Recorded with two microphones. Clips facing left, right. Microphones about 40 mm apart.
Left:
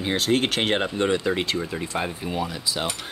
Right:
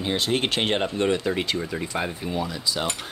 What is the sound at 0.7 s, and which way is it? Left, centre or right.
Speech, centre.